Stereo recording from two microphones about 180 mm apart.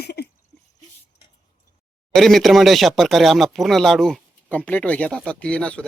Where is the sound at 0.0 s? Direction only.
60° left (ahead or behind).